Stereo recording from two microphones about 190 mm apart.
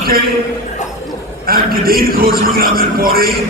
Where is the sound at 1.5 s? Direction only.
50° right (ahead or behind).